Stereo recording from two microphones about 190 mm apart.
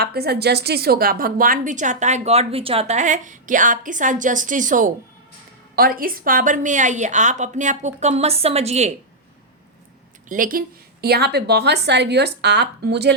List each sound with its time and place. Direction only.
0.0 s a woman's voice: 55° right (ahead or behind); by 8.9 s 35° right (ahead or behind)
10.2 s a woman's voice: 45° right (ahead or behind)
11.0 s speech: 60° right (ahead or behind)